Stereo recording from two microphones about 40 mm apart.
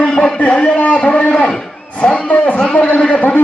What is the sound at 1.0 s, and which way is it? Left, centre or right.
Speech, left.